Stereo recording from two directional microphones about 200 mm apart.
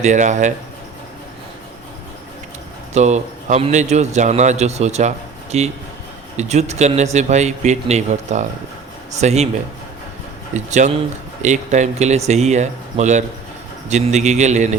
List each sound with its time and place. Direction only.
0.0 s a man's voice: 35° right (ahead or behind)
2.9 s a man's voice: 35° right (ahead or behind)
10.5 s a man's voice: 35° right (ahead or behind)